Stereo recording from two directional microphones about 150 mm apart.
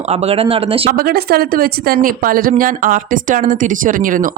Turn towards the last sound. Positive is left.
turn(degrees=-65)  # may be behind; listen again after turning